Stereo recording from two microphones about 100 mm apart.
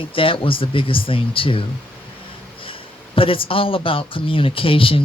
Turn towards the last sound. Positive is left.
turn(degrees=65)  # may be behind; listen again after turning